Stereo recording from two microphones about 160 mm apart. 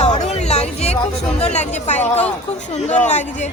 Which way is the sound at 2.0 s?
10° left (ahead or behind).